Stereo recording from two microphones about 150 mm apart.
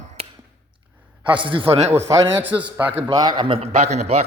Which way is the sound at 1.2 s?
35° right (ahead or behind).